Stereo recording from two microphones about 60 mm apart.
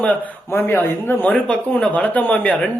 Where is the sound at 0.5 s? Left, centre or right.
Left.